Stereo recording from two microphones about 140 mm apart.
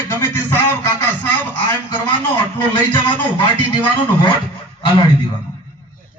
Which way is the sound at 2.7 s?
30° left (ahead or behind).